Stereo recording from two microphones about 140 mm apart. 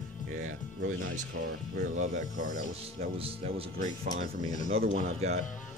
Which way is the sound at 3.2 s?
45° right (ahead or behind).